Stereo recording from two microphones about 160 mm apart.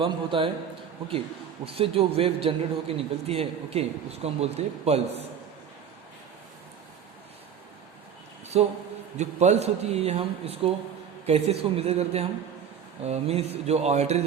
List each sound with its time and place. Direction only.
0.0 s a man's voice: 35° right (ahead or behind)
1.6 s a man's voice: 35° right (ahead or behind)
8.5 s a man's voice: 40° right (ahead or behind)